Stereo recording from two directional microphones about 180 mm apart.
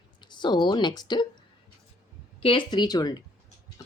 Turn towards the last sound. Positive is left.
turn(degrees=20)  # may be behind; listen again after turning